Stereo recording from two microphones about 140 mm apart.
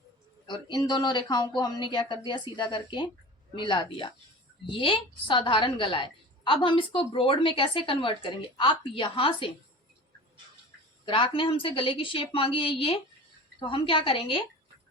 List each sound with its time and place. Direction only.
0.4 s a woman's voice: 35° left (ahead or behind)
11.0 s a woman's voice: 40° left (ahead or behind)